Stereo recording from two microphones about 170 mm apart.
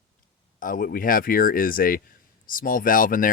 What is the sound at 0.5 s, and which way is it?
Speech, 50° left (ahead or behind).